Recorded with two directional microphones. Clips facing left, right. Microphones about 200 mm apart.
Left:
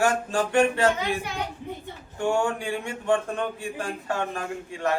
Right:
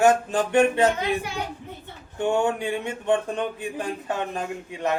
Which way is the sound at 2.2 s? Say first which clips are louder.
Right 2 dB; 20° right (ahead or behind).